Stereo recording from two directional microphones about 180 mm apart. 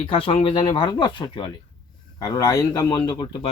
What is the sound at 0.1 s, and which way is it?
Speech, 30° left (ahead or behind).